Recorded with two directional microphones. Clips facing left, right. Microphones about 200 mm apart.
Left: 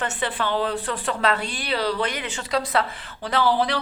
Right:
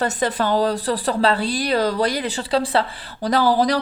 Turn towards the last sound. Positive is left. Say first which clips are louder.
# right 4 dB
turn(degrees=-40)  # may be behind; listen again after turning